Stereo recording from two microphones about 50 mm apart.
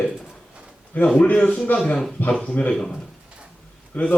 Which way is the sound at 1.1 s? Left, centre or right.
Left.